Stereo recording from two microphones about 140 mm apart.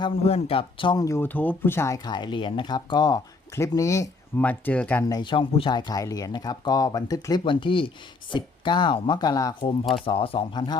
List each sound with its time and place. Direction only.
0.0 s speech: 45° left (ahead or behind)
1.0 s speech: 15° left (ahead or behind)
2.0 s speech: 35° left (ahead or behind)
4.4 s speech: 10° left (ahead or behind)
5.0 s speech: 30° left (ahead or behind)
10.1 s speech: 40° left (ahead or behind)